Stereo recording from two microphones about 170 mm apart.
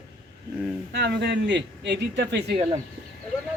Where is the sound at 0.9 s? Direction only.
80° right.